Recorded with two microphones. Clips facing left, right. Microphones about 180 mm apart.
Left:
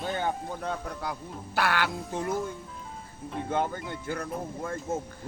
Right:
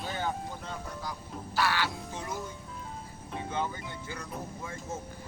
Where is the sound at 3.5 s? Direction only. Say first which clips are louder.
Left 5 dB; 50° left (ahead or behind).